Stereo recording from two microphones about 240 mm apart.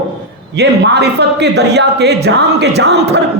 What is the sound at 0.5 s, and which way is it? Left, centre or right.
A man's voice, right.